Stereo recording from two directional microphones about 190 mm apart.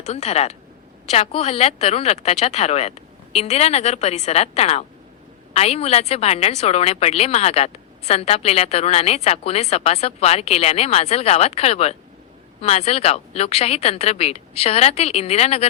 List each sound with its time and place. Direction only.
0.0 s a woman's voice: 35° left (ahead or behind)